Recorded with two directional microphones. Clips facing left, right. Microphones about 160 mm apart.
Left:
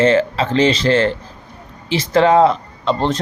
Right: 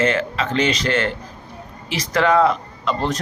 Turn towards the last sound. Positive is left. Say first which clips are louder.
# left 4 dB
turn(degrees=30)  # may be behind; listen again after turning